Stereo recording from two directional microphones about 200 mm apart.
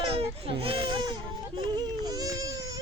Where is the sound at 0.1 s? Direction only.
30° right (ahead or behind).